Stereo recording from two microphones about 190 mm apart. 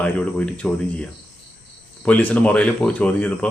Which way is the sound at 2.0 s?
10° left (ahead or behind).